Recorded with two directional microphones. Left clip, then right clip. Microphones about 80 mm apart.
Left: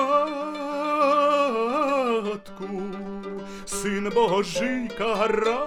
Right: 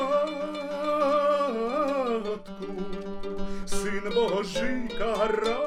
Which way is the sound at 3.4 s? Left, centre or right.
Left.